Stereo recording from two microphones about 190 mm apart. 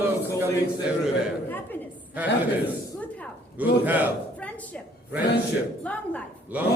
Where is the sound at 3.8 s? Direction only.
10° right (ahead or behind).